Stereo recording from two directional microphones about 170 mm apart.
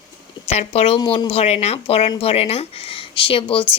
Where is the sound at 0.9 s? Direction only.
25° left (ahead or behind).